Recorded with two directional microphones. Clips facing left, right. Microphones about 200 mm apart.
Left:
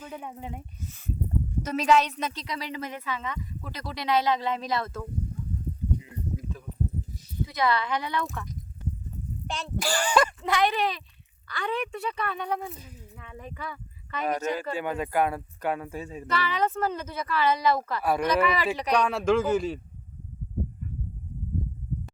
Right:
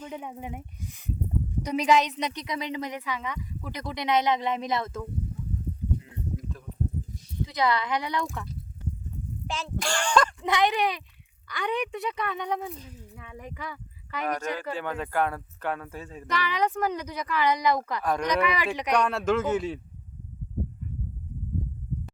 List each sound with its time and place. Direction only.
0.0 s a woman's voice: 15° right (ahead or behind)
6.0 s a sound: centre (ahead or behind)
7.4 s a woman's voice: 20° right (ahead or behind)
9.5 s speech: centre (ahead or behind)
10.4 s a woman's voice: 20° right (ahead or behind)
12.7 s speech: 10° left (ahead or behind)
13.1 s speech: 15° right (ahead or behind)
14.3 s speech: 10° left (ahead or behind)
16.3 s a woman's voice: 15° right (ahead or behind)
18.0 s speech: 5° left (ahead or behind)
18.4 s a woman's voice: 15° right (ahead or behind)
19.0 s speech: centre (ahead or behind)